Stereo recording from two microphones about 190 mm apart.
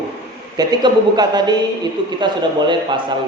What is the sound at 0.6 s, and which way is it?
A man's voice, 20° right (ahead or behind).